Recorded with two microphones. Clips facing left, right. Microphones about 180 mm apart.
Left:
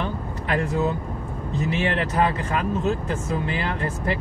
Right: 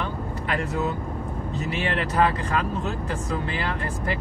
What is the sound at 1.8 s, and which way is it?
Speech, 25° left (ahead or behind).